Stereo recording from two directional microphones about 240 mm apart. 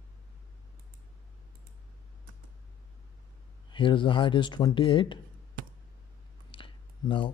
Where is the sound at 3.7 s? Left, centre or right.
Centre.